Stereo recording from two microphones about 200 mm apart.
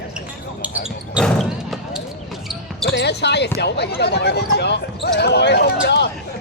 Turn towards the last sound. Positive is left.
turn(degrees=60)  # may be behind; listen again after turning